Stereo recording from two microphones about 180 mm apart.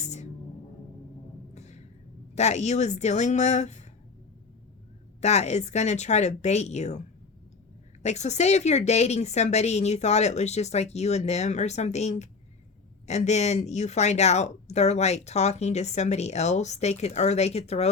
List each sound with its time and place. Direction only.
0.0 s music: 40° left (ahead or behind)
1.5 s a sound: 40° left (ahead or behind)
2.3 s speech: 40° left (ahead or behind)
5.2 s speech: 40° left (ahead or behind)
8.0 s speech: 40° left (ahead or behind)